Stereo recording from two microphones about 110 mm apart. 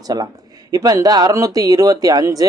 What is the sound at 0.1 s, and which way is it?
Speech, 35° right (ahead or behind).